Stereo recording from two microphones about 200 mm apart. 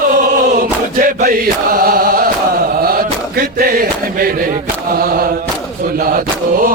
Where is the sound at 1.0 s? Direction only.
45° right (ahead or behind).